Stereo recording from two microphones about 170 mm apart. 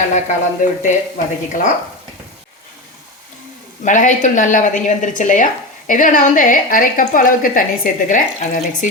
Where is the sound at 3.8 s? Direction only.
50° left (ahead or behind).